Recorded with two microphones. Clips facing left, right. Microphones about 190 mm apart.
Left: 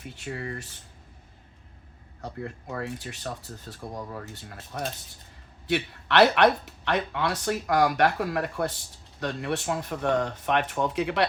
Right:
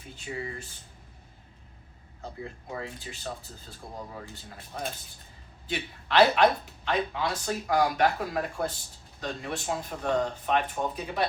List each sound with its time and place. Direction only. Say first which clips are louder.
0.3 s speech: even; 65° left (ahead or behind)
2.2 s speech: left 3 dB; 65° left (ahead or behind)
4.5 s speech: left 3 dB; 80° left
5.6 s speech: left 7 dB; 70° left (ahead or behind)